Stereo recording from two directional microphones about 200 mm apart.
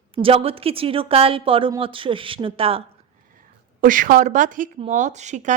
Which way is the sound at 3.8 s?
40° right (ahead or behind).